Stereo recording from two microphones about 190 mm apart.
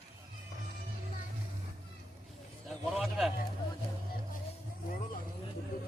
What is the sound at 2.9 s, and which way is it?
Speech, centre (ahead or behind).